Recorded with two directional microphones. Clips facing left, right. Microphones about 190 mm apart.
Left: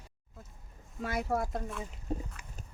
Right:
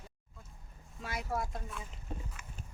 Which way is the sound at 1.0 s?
50° left (ahead or behind).